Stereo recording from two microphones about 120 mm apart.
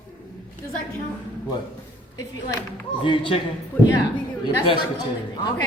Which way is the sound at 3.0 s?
45° left (ahead or behind).